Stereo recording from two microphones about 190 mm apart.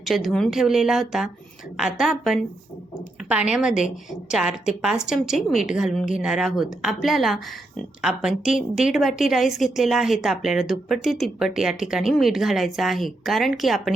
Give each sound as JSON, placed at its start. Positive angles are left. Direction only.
{"t": 0.0, "sound": "a woman's voice", "side_deg": 0}